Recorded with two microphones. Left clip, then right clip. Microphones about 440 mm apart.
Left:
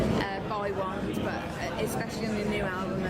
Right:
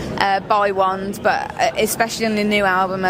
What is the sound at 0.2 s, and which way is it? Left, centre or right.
Speech, right.